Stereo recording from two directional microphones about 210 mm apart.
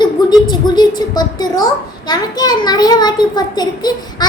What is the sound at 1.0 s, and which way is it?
A child's voice, 20° left (ahead or behind).